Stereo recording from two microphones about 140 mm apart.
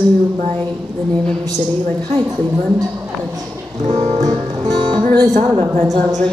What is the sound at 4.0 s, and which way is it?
Music, 55° right (ahead or behind).